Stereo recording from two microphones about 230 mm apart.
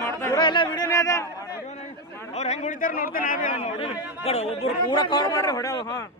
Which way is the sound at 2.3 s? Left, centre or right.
Left.